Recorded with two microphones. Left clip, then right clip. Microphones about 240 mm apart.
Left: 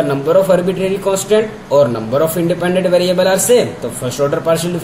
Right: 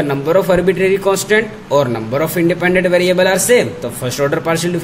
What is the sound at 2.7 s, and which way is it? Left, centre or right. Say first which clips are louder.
Speech: left 1 dB; right.